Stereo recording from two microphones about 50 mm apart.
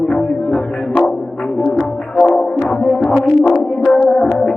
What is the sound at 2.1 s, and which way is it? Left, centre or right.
Music, centre.